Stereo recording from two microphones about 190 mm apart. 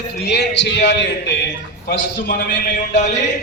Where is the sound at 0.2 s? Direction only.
60° left (ahead or behind).